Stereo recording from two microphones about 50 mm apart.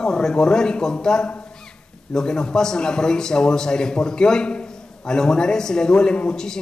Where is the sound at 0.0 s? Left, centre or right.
Centre.